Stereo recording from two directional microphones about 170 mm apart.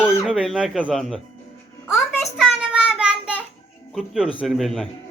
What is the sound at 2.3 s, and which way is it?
Child singing, 5° right (ahead or behind).